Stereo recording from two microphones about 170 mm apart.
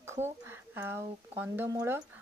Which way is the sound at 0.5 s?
15° right (ahead or behind).